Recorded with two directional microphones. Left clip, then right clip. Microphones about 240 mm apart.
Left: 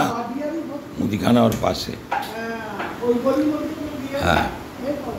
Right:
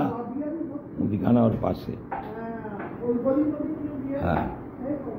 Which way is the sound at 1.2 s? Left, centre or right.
Centre.